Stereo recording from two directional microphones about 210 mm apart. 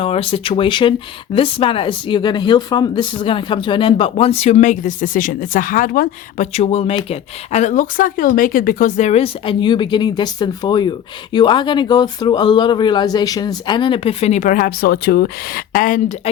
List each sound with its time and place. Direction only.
0.0 s speech: 25° left (ahead or behind)